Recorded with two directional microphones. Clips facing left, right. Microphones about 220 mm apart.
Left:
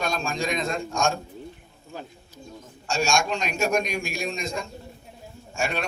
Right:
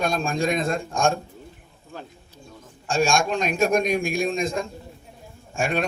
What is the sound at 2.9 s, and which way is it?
A man's voice, 50° right (ahead or behind).